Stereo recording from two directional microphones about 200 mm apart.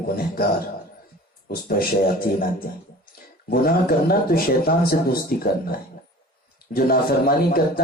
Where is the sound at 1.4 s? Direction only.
50° left (ahead or behind).